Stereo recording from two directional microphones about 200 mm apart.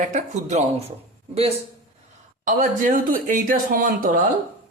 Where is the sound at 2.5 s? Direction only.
40° right (ahead or behind).